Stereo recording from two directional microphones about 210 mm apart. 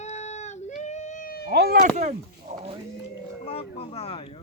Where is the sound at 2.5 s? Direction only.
35° right (ahead or behind).